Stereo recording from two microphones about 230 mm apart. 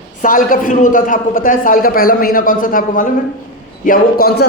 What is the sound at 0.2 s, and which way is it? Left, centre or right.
A man's voice, left.